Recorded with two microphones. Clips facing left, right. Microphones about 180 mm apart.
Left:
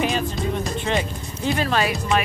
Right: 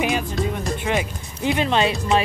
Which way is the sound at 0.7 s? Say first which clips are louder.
Right 1 dB; 10° right (ahead or behind).